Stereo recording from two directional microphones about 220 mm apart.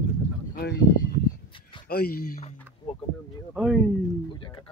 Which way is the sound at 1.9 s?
45° left (ahead or behind).